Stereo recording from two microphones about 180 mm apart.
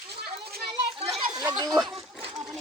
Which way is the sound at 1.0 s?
Centre (ahead or behind).